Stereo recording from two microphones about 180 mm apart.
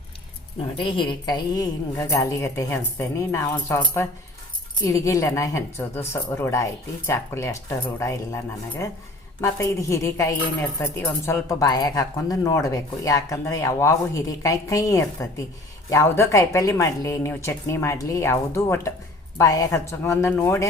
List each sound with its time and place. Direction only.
0.8 s speech: 30° left (ahead or behind)